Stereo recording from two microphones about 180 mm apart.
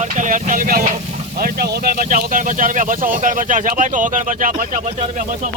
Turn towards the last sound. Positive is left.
turn(degrees=-45)  # may be behind; listen again after turning